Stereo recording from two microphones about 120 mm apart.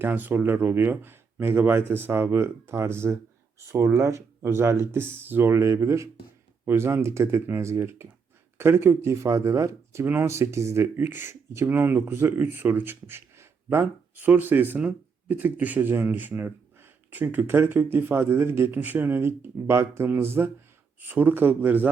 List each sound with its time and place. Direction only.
0.0 s speech: 15° right (ahead or behind)